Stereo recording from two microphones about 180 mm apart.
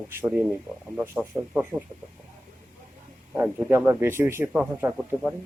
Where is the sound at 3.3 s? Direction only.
10° right (ahead or behind).